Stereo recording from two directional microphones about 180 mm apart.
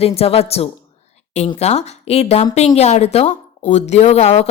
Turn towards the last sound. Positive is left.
turn(degrees=35)  # may be behind; listen again after turning